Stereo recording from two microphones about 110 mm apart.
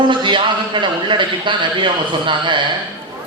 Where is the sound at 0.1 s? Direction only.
45° right (ahead or behind).